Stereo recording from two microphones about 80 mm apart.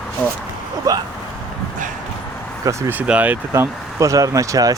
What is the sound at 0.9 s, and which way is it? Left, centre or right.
Speech, right.